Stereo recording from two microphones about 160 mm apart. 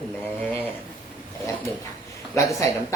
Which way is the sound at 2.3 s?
20° left (ahead or behind).